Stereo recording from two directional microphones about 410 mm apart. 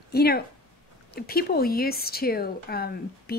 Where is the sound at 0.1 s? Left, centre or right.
Left.